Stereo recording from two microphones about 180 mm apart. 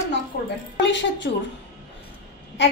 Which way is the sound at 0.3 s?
60° left (ahead or behind).